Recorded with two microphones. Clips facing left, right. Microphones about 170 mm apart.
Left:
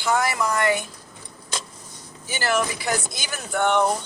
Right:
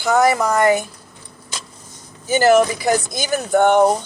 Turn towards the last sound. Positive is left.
turn(degrees=-45)  # may be behind; listen again after turning